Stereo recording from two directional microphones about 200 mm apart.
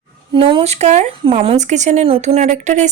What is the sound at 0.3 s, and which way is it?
Speech, 30° right (ahead or behind).